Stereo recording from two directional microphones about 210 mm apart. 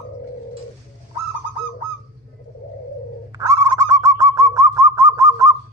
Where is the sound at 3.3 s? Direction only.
15° right (ahead or behind).